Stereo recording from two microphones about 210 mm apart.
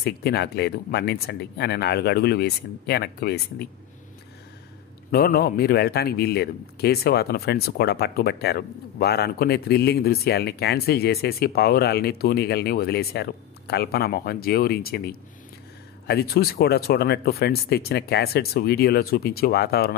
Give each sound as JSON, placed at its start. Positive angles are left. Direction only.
{"t": 0.0, "sound": "speech", "side_deg": 50}
{"t": 5.1, "sound": "speech", "side_deg": 45}